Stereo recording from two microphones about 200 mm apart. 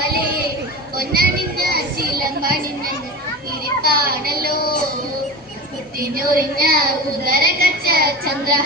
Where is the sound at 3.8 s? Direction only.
50° right (ahead or behind).